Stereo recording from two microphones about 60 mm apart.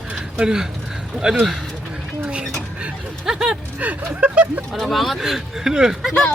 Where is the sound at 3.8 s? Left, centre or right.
Right.